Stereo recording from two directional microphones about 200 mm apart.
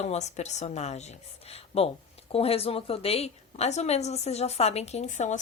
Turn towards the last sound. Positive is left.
turn(degrees=35)  # may be behind; listen again after turning